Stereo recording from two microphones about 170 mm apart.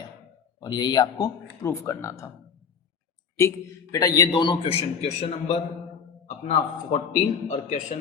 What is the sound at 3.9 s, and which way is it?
A man's voice, 20° left (ahead or behind).